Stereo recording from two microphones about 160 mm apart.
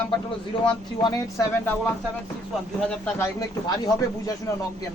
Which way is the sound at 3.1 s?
20° left (ahead or behind).